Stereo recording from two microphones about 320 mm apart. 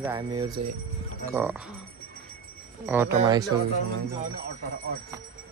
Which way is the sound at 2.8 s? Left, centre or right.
Centre.